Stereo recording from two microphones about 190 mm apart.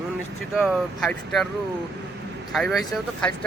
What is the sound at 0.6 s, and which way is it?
Speech, centre (ahead or behind).